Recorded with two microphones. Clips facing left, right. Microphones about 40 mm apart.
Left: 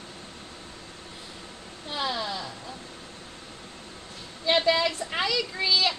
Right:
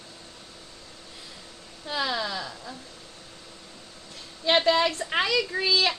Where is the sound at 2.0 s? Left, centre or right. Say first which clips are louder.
Right 1 dB; right.